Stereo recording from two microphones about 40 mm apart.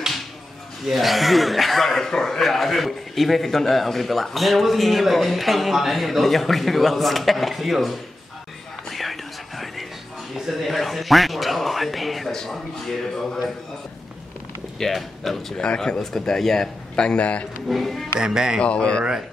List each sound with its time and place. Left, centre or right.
0.8 s a man's voice: centre
8.9 s whispering: centre
10.3 s a sound: centre
10.6 s a man's voice: centre
14.8 s a man's voice: centre
15.5 s speech: left
16.0 s speech: centre; by 17.5 s left
17.6 s a man's voice: centre
18.2 s speech: centre
18.6 s speech: left